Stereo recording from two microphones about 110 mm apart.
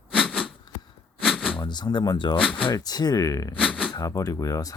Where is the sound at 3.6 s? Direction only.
10° right (ahead or behind).